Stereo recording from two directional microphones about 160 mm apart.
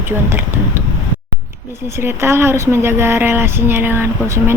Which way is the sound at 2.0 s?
15° right (ahead or behind).